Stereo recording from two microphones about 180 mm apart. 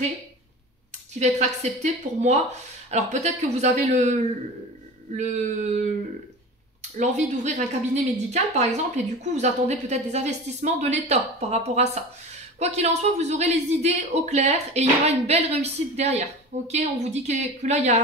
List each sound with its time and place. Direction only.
1.2 s speech: 40° right (ahead or behind)